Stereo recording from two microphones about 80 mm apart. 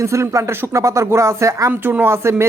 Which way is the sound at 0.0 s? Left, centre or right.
Right.